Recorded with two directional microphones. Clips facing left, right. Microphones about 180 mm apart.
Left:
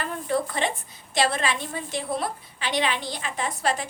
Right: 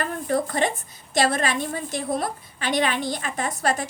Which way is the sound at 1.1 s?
45° right (ahead or behind).